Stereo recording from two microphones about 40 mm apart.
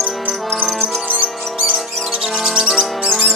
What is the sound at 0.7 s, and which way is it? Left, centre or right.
Music, right.